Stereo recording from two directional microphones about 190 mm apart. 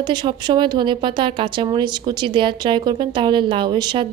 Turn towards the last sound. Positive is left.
turn(degrees=-25)  # may be behind; listen again after turning